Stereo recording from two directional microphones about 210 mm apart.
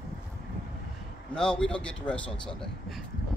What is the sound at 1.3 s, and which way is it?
A man's voice, 5° left (ahead or behind).